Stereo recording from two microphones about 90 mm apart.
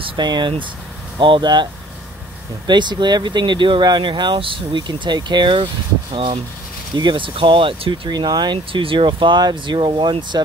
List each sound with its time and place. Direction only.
0.2 s speech: 50° right (ahead or behind)
6.1 s speech: 80° right
7.0 s speech: 65° right (ahead or behind)
8.1 s speech: 50° right (ahead or behind)